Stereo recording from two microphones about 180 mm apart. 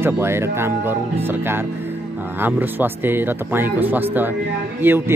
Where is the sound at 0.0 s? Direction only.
15° right (ahead or behind).